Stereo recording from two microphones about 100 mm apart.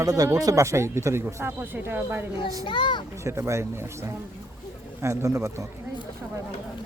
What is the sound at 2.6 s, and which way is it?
Speech, 55° left (ahead or behind).